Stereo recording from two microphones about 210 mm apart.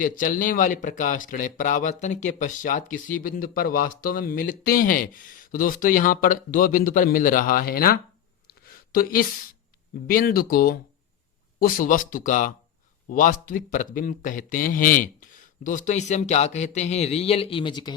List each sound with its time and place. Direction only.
0.0 s speech: 40° left (ahead or behind)
8.4 s a sound: 45° left (ahead or behind)
10.1 s speech: 45° left (ahead or behind); by 17.9 s 20° left (ahead or behind)